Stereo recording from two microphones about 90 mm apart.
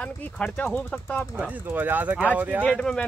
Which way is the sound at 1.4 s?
20° right (ahead or behind).